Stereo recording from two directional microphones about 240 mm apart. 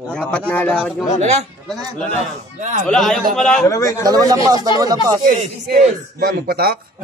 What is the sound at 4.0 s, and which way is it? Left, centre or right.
A man's voice, centre.